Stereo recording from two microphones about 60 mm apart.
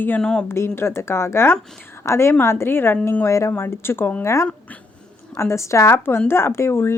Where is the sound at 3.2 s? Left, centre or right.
Left.